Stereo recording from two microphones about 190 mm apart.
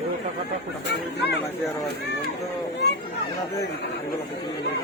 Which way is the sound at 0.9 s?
60° left (ahead or behind).